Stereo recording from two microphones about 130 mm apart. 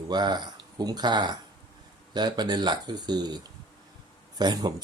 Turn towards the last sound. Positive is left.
turn(degrees=-35)  # may be behind; listen again after turning